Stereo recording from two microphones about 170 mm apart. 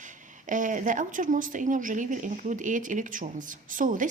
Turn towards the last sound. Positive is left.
turn(degrees=-50)  # may be behind; listen again after turning